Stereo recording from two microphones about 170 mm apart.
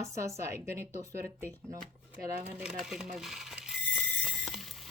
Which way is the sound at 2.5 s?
5° right (ahead or behind).